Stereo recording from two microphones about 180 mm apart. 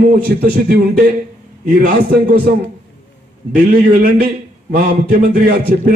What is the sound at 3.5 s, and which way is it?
Speech, 55° right (ahead or behind).